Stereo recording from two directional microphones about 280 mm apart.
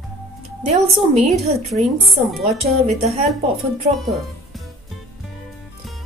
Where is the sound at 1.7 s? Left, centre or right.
Centre.